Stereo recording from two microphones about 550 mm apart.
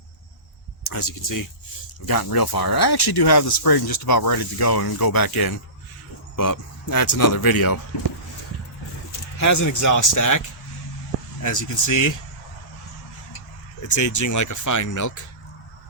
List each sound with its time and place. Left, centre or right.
0.9 s speech: left
9.4 s speech: left
11.4 s speech: left
13.8 s speech: left